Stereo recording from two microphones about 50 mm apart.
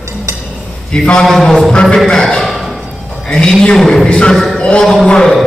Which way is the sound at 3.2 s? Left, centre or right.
Centre.